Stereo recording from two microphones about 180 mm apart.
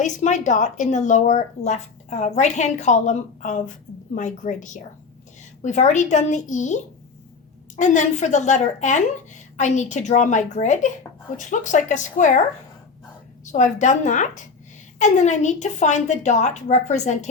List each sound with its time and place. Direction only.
0.0 s speech: 40° left (ahead or behind)
13.4 s speech: 40° left (ahead or behind)